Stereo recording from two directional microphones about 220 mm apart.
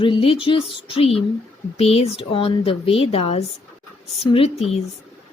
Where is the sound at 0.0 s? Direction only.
25° left (ahead or behind).